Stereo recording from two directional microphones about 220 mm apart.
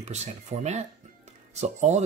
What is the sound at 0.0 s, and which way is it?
Speech, 30° right (ahead or behind).